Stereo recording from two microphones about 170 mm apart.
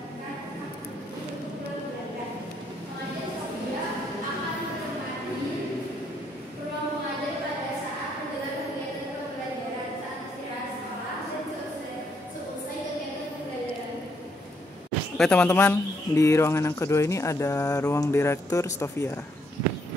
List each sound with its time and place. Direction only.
15.1 s speech: 5° left (ahead or behind)